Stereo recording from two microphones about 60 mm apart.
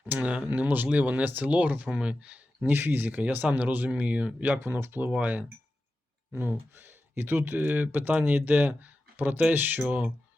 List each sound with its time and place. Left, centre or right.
0.0 s speech: right
2.6 s speech: right
4.6 s speech: right